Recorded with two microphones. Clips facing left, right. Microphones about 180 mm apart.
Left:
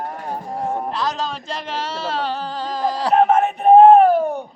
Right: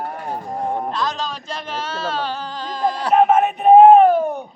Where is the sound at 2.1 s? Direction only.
30° left (ahead or behind).